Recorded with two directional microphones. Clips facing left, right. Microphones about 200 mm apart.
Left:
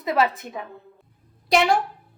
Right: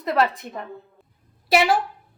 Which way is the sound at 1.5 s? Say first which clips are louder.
Even; 5° right (ahead or behind).